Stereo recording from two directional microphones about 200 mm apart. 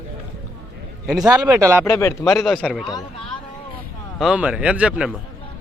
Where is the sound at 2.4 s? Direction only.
Centre (ahead or behind).